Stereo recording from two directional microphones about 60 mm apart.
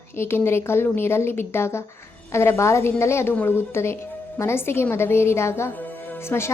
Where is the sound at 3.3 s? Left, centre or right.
Left.